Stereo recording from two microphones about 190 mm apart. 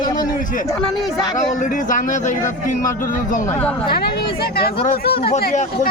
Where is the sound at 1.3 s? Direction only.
45° left (ahead or behind).